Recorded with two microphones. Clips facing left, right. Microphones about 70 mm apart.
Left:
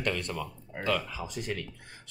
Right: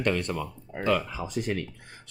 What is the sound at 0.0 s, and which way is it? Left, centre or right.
Speech, right.